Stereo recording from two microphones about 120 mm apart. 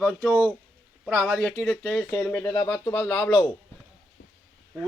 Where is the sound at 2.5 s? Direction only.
30° left (ahead or behind).